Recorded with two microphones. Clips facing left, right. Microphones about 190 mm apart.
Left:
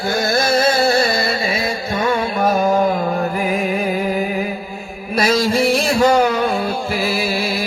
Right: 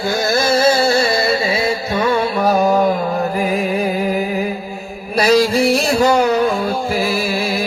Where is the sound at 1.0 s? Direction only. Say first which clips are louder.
Right 3 dB; 25° right (ahead or behind).